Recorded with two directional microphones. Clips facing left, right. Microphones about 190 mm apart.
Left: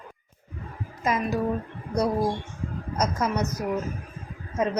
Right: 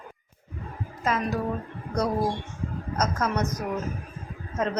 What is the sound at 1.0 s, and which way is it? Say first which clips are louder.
Speech: left 1 dB; 10° left (ahead or behind).